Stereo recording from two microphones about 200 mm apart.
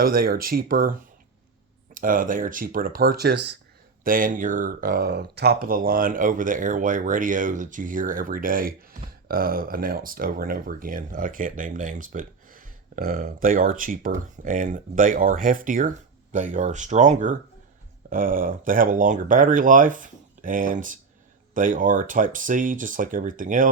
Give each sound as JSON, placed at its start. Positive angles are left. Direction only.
{"t": 0.0, "sound": "speech", "side_deg": -45}
{"t": 4.0, "sound": "speech", "side_deg": -45}